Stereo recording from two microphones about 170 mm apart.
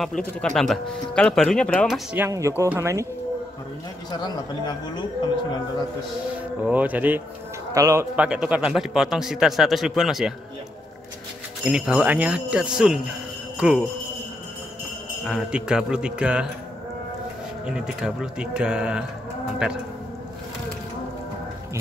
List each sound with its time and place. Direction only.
0.0 s a man's voice: 5° left (ahead or behind)
2.1 s speech: 15° right (ahead or behind)
6.6 s a man's voice: 10° right (ahead or behind)
11.6 s a man's voice: 5° right (ahead or behind)
15.2 s a man's voice: 5° right (ahead or behind)
17.6 s a man's voice: 5° right (ahead or behind)